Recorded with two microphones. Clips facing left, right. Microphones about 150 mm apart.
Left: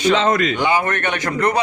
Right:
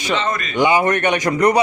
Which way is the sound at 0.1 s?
90° left.